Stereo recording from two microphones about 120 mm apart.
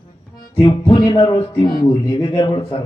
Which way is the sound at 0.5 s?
45° left (ahead or behind).